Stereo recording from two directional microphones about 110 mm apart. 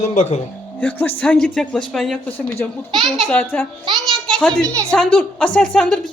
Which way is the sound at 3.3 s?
20° left (ahead or behind).